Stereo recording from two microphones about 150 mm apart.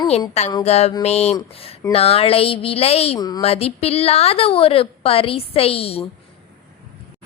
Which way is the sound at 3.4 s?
40° left (ahead or behind).